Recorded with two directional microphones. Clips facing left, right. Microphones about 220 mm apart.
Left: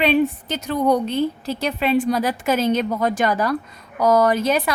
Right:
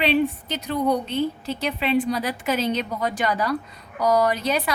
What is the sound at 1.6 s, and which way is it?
A woman's voice, 45° left (ahead or behind).